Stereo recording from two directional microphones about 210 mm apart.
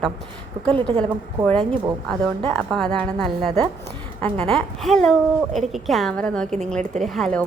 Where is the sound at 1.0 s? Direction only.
5° left (ahead or behind).